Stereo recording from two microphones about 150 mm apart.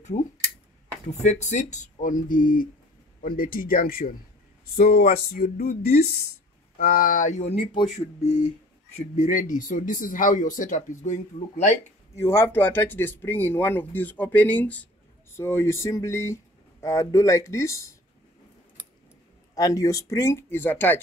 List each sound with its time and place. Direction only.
0.0 s a sound: 50° left (ahead or behind)
1.2 s speech: 50° left (ahead or behind); by 4.1 s 70° left (ahead or behind)
4.7 s a sound: 80° left
6.8 s speech: 70° left (ahead or behind); by 11.7 s 45° left (ahead or behind)
12.2 s speech: 15° left (ahead or behind)
19.5 s speech: 20° left (ahead or behind)